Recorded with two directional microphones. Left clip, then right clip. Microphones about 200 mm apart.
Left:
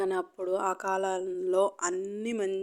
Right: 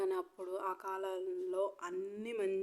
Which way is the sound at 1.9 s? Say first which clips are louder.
Left 8 dB; 15° left (ahead or behind).